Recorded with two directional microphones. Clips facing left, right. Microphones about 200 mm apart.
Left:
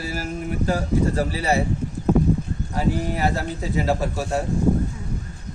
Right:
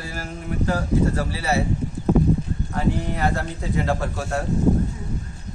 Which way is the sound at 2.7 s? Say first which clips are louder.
Left 1 dB; 5° left (ahead or behind).